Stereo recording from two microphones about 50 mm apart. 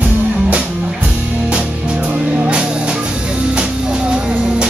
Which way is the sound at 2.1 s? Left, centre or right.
Centre.